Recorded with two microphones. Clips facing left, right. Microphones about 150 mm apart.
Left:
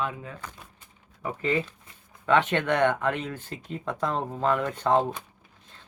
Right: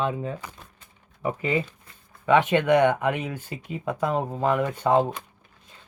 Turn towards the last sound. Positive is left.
turn(degrees=-10)  # may be behind; listen again after turning